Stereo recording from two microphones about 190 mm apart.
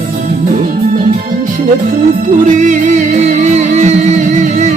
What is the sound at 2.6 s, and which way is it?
Music, 40° right (ahead or behind).